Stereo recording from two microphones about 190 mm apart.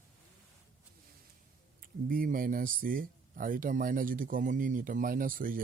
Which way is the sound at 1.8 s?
50° right (ahead or behind).